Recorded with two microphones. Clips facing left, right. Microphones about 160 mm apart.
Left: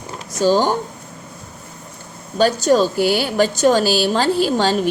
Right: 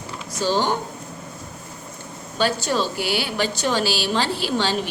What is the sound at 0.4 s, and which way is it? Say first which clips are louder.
Speech: left 6 dB; 45° left (ahead or behind).